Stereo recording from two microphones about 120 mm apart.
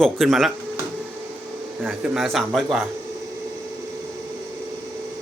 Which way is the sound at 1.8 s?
Centre (ahead or behind).